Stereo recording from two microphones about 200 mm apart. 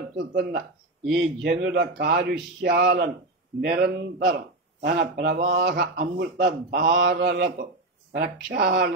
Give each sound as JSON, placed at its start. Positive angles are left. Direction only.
{"t": 0.2, "sound": "a man's voice", "side_deg": -60}